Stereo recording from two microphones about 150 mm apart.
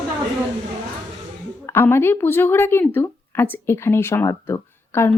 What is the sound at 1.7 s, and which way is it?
Speech, 15° left (ahead or behind).